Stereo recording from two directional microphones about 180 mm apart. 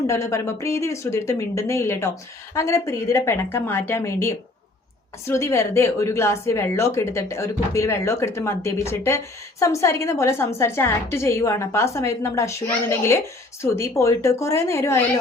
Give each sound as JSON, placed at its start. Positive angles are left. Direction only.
{"t": 0.1, "sound": "a woman's voice", "side_deg": 15}